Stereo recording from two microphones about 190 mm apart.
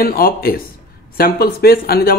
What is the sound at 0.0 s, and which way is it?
Speech, 50° left (ahead or behind).